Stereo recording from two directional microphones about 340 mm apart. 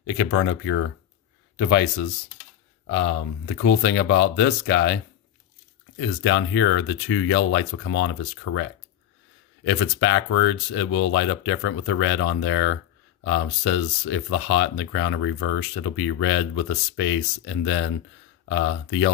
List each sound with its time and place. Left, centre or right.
0.0 s speech: left
9.7 s speech: left